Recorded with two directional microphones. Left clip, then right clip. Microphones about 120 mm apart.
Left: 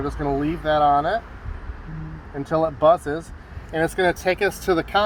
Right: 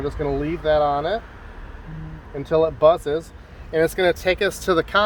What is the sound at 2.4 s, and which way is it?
Speech, 40° right (ahead or behind).